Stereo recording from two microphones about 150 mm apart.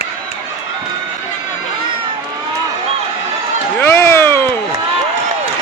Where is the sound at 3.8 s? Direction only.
15° left (ahead or behind).